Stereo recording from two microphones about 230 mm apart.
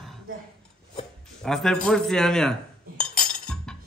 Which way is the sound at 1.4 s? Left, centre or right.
Centre.